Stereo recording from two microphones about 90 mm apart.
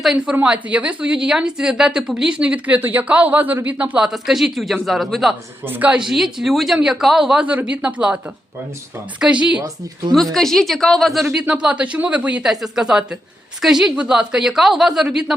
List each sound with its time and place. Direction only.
0.0 s a woman's voice: 5° right (ahead or behind)
5.6 s a woman's voice: 20° right (ahead or behind)
5.9 s a woman's voice: 5° right (ahead or behind)
9.2 s a woman's voice: 10° right (ahead or behind)
10.3 s a woman's voice: 5° left (ahead or behind)